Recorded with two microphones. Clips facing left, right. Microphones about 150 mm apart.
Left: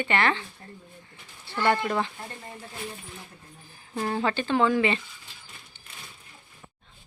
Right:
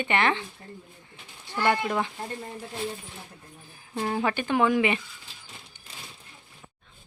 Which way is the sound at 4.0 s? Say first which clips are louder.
Even; 10° right (ahead or behind).